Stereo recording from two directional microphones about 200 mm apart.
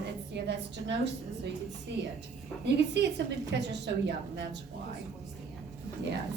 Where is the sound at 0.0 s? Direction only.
60° right (ahead or behind).